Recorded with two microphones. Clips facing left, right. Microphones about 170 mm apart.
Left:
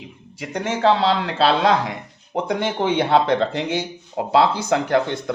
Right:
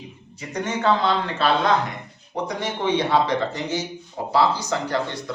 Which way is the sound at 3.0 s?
60° left (ahead or behind).